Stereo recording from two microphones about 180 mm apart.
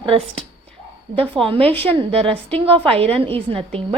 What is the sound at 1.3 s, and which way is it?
A woman's voice, 30° right (ahead or behind).